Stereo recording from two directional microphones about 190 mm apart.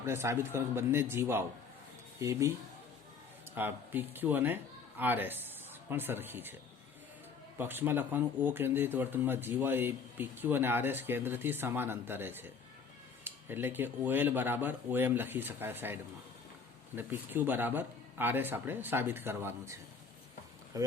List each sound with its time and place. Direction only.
0.0 s speech: 15° right (ahead or behind)
3.5 s a man's voice: 10° right (ahead or behind)
7.6 s speech: 10° right (ahead or behind)
20.7 s speech: 15° right (ahead or behind)